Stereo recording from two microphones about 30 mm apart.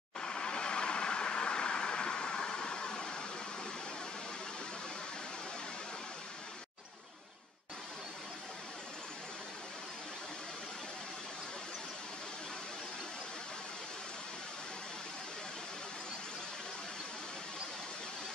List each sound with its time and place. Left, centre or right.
0.2 s vehicle: left